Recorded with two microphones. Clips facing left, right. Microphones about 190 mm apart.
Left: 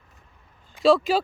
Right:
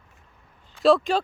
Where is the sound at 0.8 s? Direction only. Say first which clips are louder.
Even; centre (ahead or behind).